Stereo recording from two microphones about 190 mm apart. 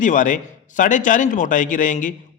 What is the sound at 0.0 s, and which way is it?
A man's voice, 45° left (ahead or behind).